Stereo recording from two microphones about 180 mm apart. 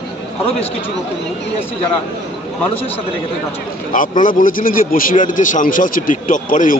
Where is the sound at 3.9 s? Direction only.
45° left (ahead or behind).